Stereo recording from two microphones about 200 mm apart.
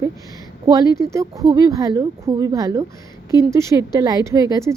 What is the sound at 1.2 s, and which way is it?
Speech, 20° right (ahead or behind).